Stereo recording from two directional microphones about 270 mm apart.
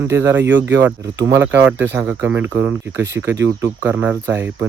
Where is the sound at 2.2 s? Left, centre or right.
Centre.